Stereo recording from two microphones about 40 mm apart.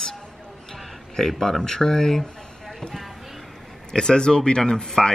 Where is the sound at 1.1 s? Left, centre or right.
Centre.